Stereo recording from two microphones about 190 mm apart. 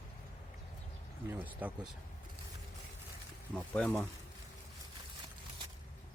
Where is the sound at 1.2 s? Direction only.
10° right (ahead or behind).